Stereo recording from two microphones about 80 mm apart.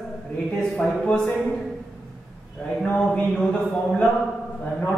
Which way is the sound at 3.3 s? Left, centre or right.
Centre.